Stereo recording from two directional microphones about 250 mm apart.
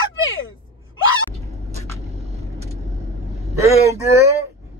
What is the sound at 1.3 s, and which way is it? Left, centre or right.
Vehicle, right.